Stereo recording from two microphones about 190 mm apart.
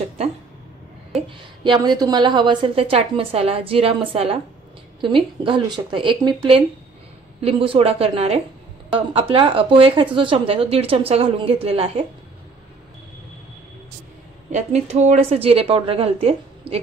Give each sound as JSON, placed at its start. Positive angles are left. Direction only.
{"t": 1.6, "sound": "a woman's voice", "side_deg": -25}
{"t": 14.5, "sound": "a woman's voice", "side_deg": -35}